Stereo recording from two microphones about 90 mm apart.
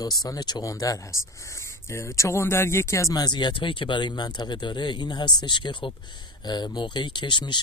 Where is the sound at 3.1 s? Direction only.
55° left (ahead or behind).